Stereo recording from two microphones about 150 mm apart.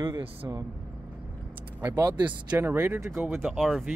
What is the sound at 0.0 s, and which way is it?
Speech, 35° right (ahead or behind).